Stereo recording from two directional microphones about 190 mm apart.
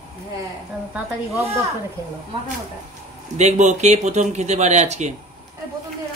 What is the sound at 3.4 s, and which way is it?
Speech, 35° right (ahead or behind).